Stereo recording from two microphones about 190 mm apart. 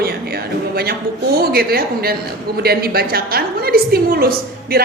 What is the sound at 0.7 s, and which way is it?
A man's voice, 55° right (ahead or behind).